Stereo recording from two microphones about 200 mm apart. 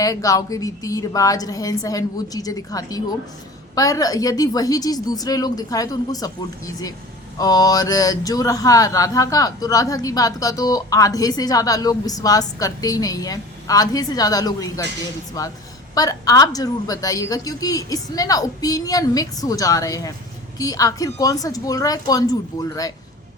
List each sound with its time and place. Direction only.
0.0 s speech: 15° left (ahead or behind)
7.3 s speech: 20° left (ahead or behind)